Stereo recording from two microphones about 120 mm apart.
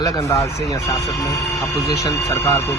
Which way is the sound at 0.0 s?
25° left (ahead or behind).